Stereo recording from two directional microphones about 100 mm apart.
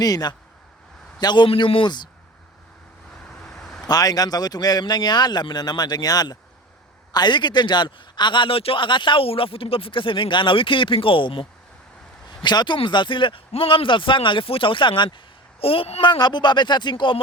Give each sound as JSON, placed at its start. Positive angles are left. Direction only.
{"t": 0.0, "sound": "speech", "side_deg": 40}
{"t": 1.5, "sound": "a man's voice", "side_deg": 60}
{"t": 3.2, "sound": "vehicle", "side_deg": 5}
{"t": 3.8, "sound": "a man's voice", "side_deg": 40}
{"t": 12.4, "sound": "a man's voice", "side_deg": 50}
{"t": 15.6, "sound": "speech", "side_deg": 70}